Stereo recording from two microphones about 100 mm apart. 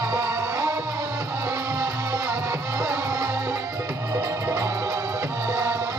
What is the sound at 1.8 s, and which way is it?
Music, 30° right (ahead or behind).